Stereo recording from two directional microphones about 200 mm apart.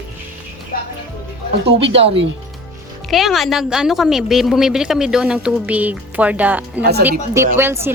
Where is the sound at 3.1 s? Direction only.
Centre (ahead or behind).